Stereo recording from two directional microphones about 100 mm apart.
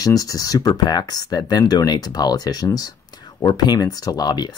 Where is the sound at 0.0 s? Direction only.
35° left (ahead or behind).